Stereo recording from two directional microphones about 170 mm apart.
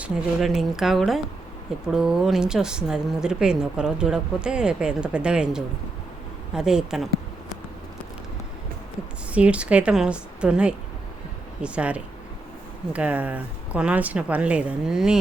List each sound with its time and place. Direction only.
0.0 s a woman's voice: centre (ahead or behind)
9.3 s speech: 5° right (ahead or behind)